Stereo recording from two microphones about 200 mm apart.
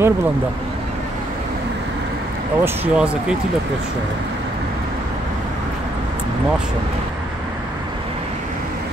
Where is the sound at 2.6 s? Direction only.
5° right (ahead or behind).